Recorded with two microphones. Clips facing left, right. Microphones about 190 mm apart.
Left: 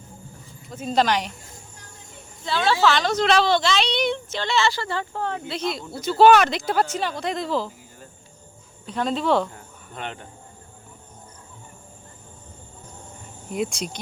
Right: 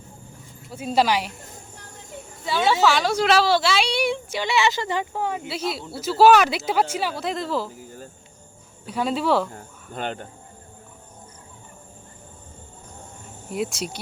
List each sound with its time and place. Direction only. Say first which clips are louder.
0.7 s a woman's voice: even; 10° right (ahead or behind)
2.4 s a woman's voice: right 1 dB; 10° right (ahead or behind)
8.9 s a woman's voice: even; 10° right (ahead or behind)
9.5 s speech: right 4 dB; 40° right (ahead or behind)
13.5 s speech: even; 5° right (ahead or behind)